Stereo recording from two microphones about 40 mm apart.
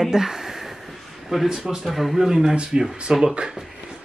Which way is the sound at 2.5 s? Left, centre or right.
Right.